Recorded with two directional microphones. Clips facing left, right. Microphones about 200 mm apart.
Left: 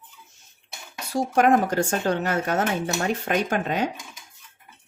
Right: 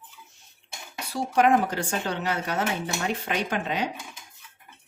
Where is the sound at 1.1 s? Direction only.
45° left (ahead or behind).